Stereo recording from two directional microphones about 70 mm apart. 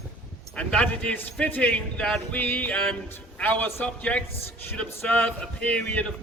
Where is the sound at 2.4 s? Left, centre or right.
Left.